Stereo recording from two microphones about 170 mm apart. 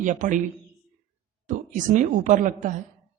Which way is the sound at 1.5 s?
50° right (ahead or behind).